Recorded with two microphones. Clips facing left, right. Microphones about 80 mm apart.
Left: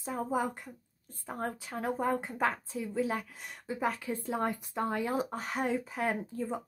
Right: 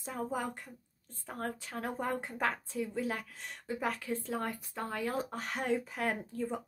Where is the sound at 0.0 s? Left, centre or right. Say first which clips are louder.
Left 4 dB; centre.